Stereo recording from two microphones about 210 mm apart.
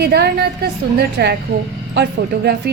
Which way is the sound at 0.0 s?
50° right (ahead or behind).